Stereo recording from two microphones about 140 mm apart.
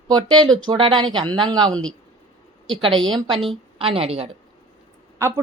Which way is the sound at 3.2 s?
35° right (ahead or behind).